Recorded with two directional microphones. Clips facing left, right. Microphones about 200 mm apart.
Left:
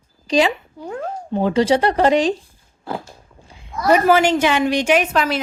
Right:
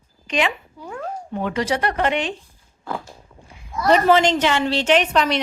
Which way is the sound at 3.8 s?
5° left (ahead or behind).